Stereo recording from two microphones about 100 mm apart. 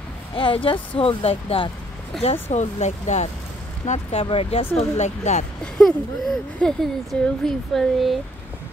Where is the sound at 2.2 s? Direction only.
90° left.